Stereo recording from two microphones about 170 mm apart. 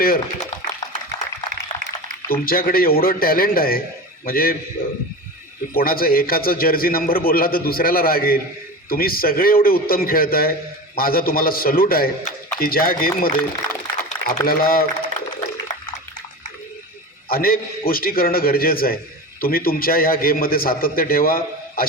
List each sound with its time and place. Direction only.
0.0 s a man's voice: 60° left (ahead or behind)
2.3 s a man's voice: 60° left (ahead or behind)
17.2 s a man's voice: 60° left (ahead or behind)